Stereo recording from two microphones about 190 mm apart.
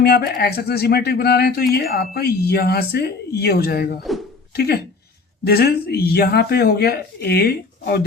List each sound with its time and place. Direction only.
0.0 s speech: 55° left (ahead or behind)